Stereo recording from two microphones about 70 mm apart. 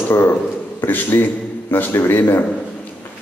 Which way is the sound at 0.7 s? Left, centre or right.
Left.